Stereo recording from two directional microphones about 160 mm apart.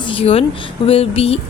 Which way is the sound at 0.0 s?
35° left (ahead or behind).